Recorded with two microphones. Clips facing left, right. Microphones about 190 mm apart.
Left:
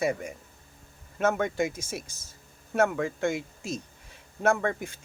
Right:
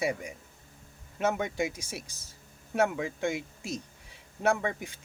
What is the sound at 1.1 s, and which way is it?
A man's voice, 15° right (ahead or behind).